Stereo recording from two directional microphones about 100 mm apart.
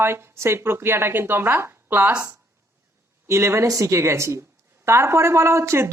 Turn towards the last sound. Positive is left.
turn(degrees=-25)  # may be behind; listen again after turning